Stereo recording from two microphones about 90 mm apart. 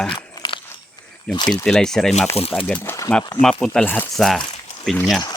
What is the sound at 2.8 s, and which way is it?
Speech, 35° left (ahead or behind).